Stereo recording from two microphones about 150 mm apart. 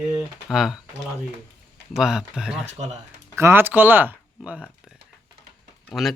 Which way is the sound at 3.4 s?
15° right (ahead or behind).